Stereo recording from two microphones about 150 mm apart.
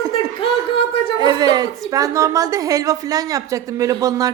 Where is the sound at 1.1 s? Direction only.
30° right (ahead or behind).